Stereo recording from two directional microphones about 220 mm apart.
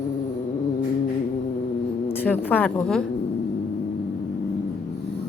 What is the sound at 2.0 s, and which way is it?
Speech, 10° left (ahead or behind).